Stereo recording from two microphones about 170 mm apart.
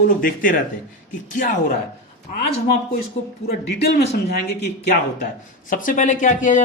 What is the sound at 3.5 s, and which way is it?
Speech, 85° left.